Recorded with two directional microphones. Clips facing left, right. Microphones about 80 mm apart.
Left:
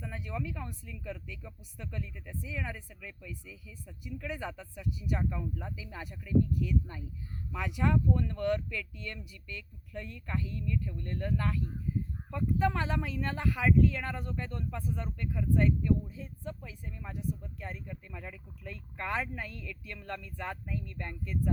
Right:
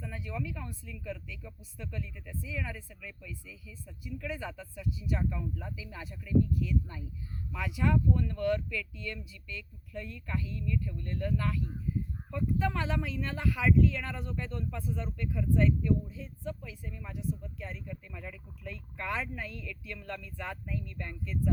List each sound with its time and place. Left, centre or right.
0.1 s speech: left